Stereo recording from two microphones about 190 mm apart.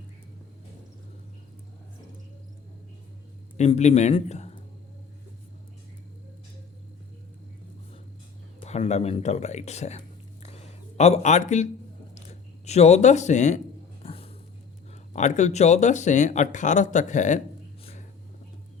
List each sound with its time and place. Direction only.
3.6 s a man's voice: 35° left (ahead or behind)
8.6 s speech: 35° left (ahead or behind)
10.4 s a sound: 35° left (ahead or behind)
14.0 s dog: 30° left (ahead or behind)
15.1 s speech: 40° left (ahead or behind)